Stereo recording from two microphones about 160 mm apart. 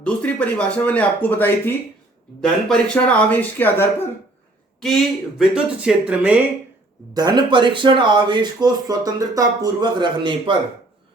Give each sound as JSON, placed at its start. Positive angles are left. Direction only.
{"t": 0.0, "sound": "speech", "side_deg": 5}
{"t": 4.8, "sound": "speech", "side_deg": 0}
{"t": 7.1, "sound": "speech", "side_deg": -25}